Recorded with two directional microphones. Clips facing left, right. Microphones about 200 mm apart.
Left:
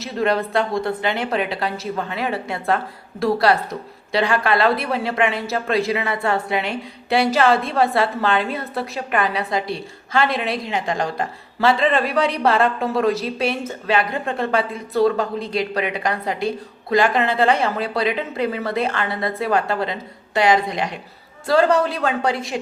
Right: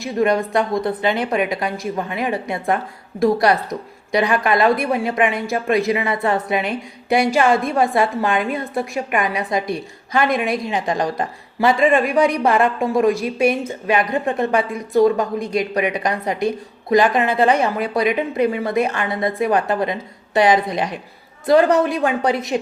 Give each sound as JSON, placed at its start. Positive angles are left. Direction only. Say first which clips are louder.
{"t": 0.0, "sound": "a woman's voice", "louder": "right 3 dB", "side_deg": -15}